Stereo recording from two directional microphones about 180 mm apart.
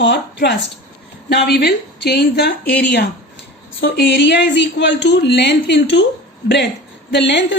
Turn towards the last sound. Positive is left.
turn(degrees=75)  # may be behind; listen again after turning